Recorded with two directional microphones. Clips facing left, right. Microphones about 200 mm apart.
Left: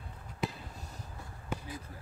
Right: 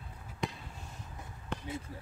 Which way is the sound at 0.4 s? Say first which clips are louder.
Left 1 dB; 5° left (ahead or behind).